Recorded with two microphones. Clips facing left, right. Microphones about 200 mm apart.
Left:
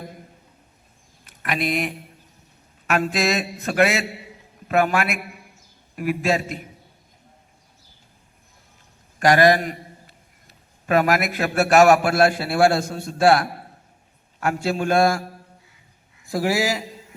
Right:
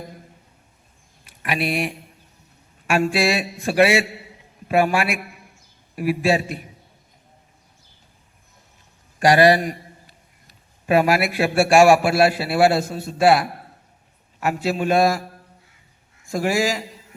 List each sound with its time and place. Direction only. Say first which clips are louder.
1.4 s a man's voice: right 1 dB; 10° right (ahead or behind)
9.2 s a man's voice: right 1 dB; 15° right (ahead or behind)
10.8 s a man's voice: right 2 dB; 10° right (ahead or behind)
16.4 s a man's voice: right 1 dB; 10° left (ahead or behind)